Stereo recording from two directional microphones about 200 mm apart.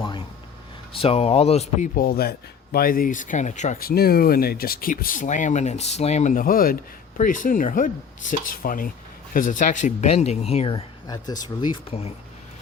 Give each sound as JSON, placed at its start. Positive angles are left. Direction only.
{"t": 0.9, "sound": "speech", "side_deg": 30}
{"t": 2.0, "sound": "speech", "side_deg": 50}